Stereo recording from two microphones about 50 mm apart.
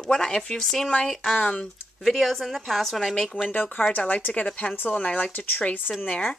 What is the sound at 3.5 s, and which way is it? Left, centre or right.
Speech, left.